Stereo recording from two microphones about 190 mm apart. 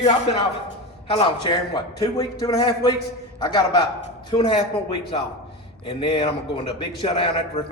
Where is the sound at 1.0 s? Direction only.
30° left (ahead or behind).